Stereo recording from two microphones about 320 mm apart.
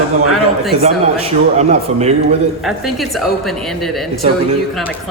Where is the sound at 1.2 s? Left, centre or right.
Centre.